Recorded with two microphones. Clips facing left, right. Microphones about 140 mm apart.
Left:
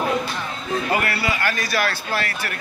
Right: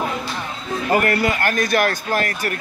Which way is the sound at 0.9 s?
45° right (ahead or behind).